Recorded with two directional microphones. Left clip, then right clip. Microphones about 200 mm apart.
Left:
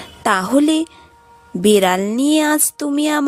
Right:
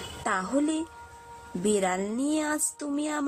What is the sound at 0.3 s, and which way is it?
Speech, 45° left (ahead or behind).